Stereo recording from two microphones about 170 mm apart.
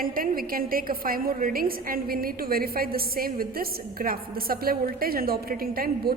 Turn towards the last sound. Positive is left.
turn(degrees=-60)  # may be behind; listen again after turning